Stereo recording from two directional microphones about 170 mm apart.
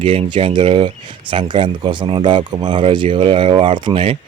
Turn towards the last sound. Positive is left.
turn(degrees=-35)  # may be behind; listen again after turning